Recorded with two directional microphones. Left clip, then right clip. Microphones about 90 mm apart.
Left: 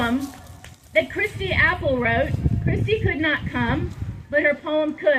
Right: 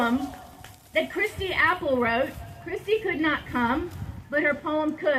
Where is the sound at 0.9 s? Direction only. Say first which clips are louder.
Left 4 dB; 25° right (ahead or behind).